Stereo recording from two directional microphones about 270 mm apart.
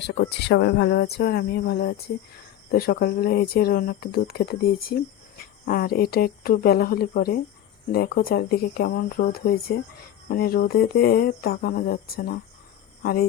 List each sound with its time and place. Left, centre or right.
0.0 s speech: left